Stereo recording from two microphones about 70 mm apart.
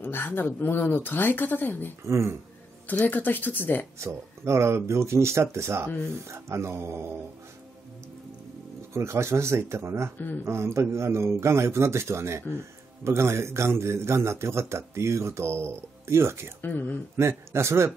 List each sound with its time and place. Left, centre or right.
0.0 s speech: left
2.0 s a man's voice: right
2.9 s speech: left
4.0 s a man's voice: right
8.9 s a man's voice: right
10.1 s speech: left
10.4 s a man's voice: right
16.6 s speech: left
17.2 s a man's voice: right